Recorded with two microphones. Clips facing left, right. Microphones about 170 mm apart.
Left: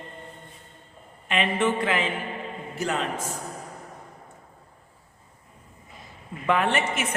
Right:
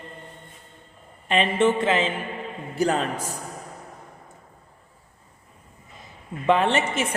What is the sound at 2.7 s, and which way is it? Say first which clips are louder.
Speech: right 5 dB; 35° right (ahead or behind).